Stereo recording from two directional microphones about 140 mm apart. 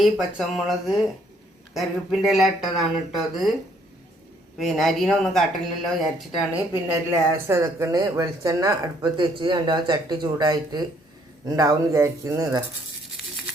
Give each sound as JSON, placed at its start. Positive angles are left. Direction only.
{"t": 0.0, "sound": "speech", "side_deg": 0}
{"t": 4.5, "sound": "speech", "side_deg": 0}
{"t": 7.4, "sound": "speech", "side_deg": -20}
{"t": 9.0, "sound": "speech", "side_deg": -35}
{"t": 13.2, "sound": "a sound", "side_deg": 0}